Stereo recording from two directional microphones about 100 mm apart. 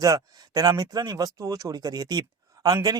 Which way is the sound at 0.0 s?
35° right (ahead or behind).